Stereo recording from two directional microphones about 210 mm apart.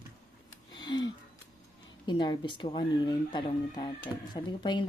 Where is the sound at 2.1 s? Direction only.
20° left (ahead or behind).